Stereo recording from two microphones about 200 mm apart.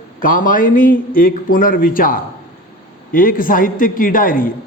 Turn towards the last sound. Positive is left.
turn(degrees=45)  # may be behind; listen again after turning